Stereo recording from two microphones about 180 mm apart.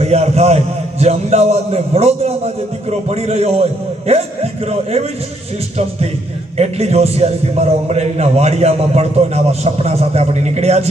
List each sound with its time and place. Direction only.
0.0 s a man's voice: 35° right (ahead or behind)
6.6 s a man's voice: 35° right (ahead or behind)